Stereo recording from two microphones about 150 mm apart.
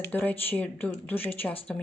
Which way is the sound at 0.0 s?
10° left (ahead or behind).